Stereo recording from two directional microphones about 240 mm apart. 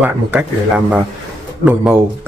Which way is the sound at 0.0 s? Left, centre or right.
Centre.